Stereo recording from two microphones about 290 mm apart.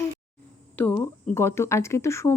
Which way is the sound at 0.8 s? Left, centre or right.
Centre.